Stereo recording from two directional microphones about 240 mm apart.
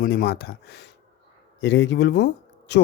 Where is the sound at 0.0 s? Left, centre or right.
Left.